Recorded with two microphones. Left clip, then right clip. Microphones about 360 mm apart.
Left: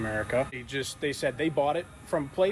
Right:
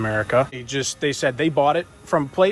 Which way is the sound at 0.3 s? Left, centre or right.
Right.